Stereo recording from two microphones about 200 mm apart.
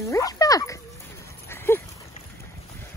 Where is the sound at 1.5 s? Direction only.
10° left (ahead or behind).